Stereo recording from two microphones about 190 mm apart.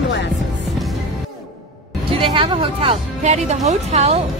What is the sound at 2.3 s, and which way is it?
Speech, 25° right (ahead or behind).